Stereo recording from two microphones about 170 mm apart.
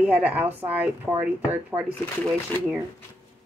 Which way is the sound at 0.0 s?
10° right (ahead or behind).